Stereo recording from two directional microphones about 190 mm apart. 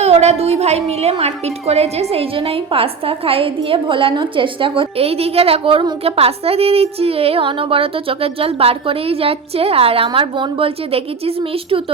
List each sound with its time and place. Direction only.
0.0 s a woman's voice: 35° right (ahead or behind)